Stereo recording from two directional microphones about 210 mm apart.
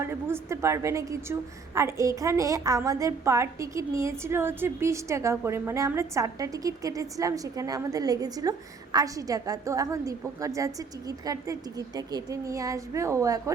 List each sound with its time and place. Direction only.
0.0 s a woman's voice: 10° right (ahead or behind)